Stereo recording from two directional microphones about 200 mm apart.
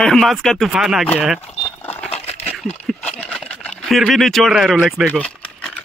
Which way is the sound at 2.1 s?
30° left (ahead or behind).